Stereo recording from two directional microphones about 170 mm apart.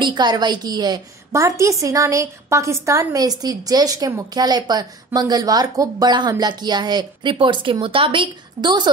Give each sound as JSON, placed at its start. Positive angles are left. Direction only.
{"t": 0.0, "sound": "a woman's voice", "side_deg": -25}